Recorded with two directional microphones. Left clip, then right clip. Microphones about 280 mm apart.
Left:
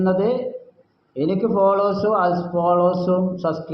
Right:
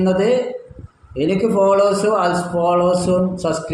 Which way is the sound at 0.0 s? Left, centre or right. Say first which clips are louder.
Right 4 dB; centre.